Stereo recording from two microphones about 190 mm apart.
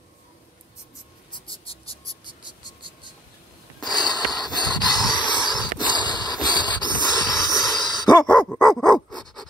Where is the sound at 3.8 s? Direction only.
20° left (ahead or behind).